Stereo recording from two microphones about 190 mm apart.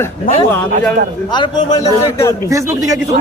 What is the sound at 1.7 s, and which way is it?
Speech, 15° left (ahead or behind).